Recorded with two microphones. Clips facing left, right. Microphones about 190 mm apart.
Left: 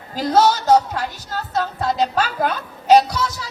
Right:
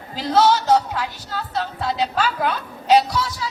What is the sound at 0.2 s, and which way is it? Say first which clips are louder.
Speech: left 1 dB; 45° left (ahead or behind).